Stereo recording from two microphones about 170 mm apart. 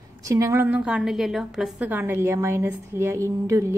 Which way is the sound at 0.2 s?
20° right (ahead or behind).